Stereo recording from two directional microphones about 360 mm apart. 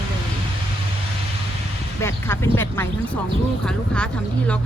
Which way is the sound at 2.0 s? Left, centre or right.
Centre.